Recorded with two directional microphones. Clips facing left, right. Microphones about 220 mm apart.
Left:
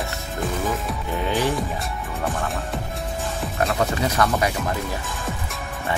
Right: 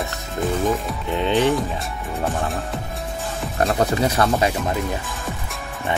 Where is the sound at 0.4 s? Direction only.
Centre (ahead or behind).